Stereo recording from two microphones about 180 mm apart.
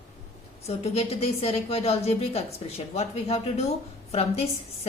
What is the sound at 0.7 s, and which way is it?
A woman's voice, 35° left (ahead or behind).